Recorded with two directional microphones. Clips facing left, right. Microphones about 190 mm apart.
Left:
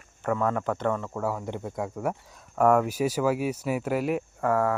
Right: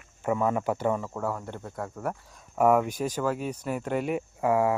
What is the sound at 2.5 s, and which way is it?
Speech, 5° right (ahead or behind).